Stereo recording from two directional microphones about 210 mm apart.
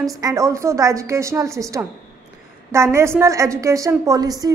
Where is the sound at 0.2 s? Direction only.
15° right (ahead or behind).